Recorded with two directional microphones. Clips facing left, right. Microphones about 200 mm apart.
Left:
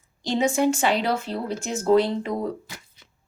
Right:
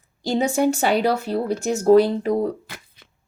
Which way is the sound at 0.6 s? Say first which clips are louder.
Right 2 dB; 40° right (ahead or behind).